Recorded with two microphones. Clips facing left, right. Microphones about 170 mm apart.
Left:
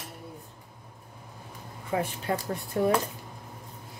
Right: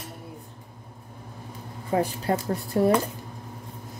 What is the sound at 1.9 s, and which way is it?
Speech, 35° right (ahead or behind).